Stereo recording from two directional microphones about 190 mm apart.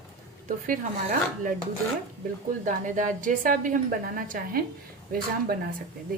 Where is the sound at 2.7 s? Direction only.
40° right (ahead or behind).